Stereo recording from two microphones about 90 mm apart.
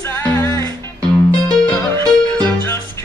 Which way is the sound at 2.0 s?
45° right (ahead or behind).